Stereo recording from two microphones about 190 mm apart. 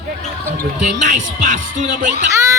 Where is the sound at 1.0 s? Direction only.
40° right (ahead or behind).